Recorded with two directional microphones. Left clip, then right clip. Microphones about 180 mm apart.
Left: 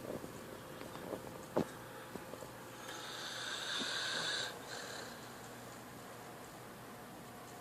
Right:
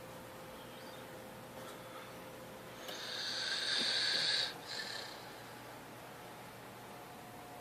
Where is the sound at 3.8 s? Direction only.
40° right (ahead or behind).